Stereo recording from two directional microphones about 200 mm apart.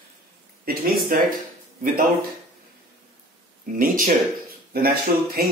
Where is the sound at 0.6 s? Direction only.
45° right (ahead or behind).